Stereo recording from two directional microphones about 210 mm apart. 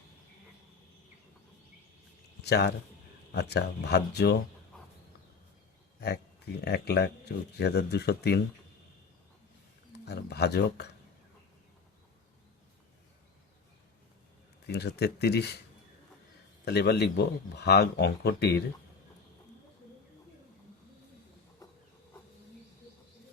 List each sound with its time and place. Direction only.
2.4 s speech: 50° left (ahead or behind)
6.0 s speech: 50° left (ahead or behind)
9.9 s speech: 50° left (ahead or behind)
14.7 s speech: 50° left (ahead or behind)
16.6 s speech: 50° left (ahead or behind)
21.6 s a sound: 15° left (ahead or behind)